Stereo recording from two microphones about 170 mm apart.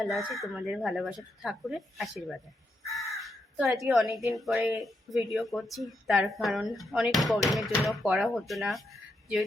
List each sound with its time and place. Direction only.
0.0 s speech: centre (ahead or behind)
2.8 s crow: centre (ahead or behind)
4.4 s speech: centre (ahead or behind)